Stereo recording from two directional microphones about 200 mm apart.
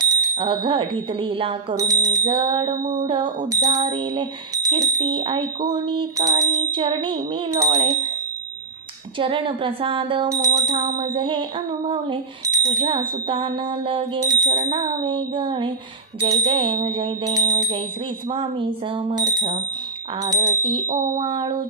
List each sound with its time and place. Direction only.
0.0 s speech: 25° right (ahead or behind)
1.8 s speech: 15° right (ahead or behind)
9.2 s speech: 25° right (ahead or behind)
10.3 s bicycle bell: 15° right (ahead or behind)
11.0 s speech: 25° right (ahead or behind)